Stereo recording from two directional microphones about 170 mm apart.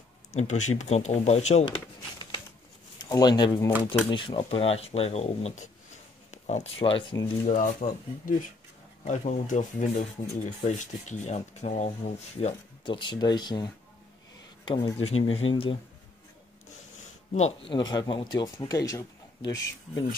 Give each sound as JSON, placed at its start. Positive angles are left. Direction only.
{"t": 0.3, "sound": "speech", "side_deg": 40}
{"t": 3.0, "sound": "speech", "side_deg": 25}
{"t": 6.3, "sound": "a sound", "side_deg": 45}
{"t": 6.8, "sound": "speech", "side_deg": 30}
{"t": 7.4, "sound": "speech", "side_deg": 50}
{"t": 17.3, "sound": "speech", "side_deg": 40}
{"t": 17.7, "sound": "speech", "side_deg": 25}